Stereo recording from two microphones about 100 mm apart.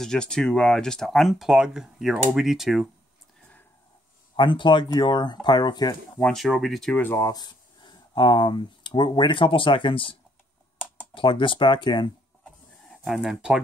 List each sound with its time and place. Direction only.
0.0 s speech: 5° left (ahead or behind)
4.4 s speech: 50° left (ahead or behind)
6.3 s speech: 5° right (ahead or behind)
7.2 s speech: 40° left (ahead or behind); by 10.1 s 60° left (ahead or behind)
11.1 s speech: 55° left (ahead or behind)
13.0 s speech: 5° right (ahead or behind)